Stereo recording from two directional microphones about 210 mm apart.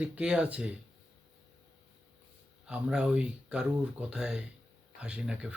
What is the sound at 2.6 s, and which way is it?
Speech, 5° right (ahead or behind).